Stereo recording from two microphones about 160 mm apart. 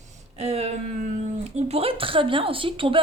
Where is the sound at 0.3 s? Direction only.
40° right (ahead or behind).